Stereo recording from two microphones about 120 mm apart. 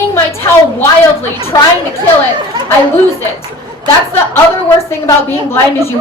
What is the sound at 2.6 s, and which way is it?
Speech, 40° right (ahead or behind).